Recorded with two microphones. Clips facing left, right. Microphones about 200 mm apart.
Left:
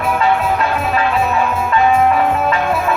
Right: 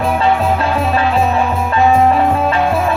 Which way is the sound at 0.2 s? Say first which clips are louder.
Right 1 dB; 30° right (ahead or behind).